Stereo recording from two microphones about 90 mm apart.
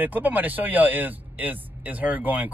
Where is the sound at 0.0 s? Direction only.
20° right (ahead or behind).